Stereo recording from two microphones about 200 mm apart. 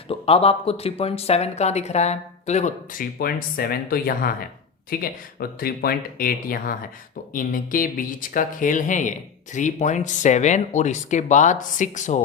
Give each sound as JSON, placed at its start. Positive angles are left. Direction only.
{"t": 0.1, "sound": "speech", "side_deg": 30}